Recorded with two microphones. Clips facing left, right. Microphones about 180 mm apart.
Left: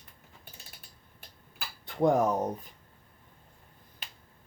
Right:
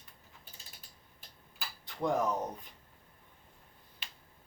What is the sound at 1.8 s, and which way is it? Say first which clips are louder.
Speech: left 7 dB; 50° left (ahead or behind).